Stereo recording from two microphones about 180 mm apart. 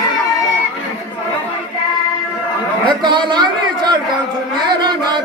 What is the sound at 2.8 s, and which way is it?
A man's voice, 25° right (ahead or behind).